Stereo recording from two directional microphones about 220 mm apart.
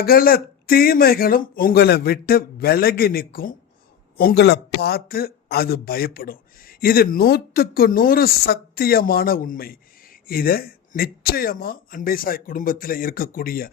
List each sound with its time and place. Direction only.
0.0 s a man's voice: 40° left (ahead or behind)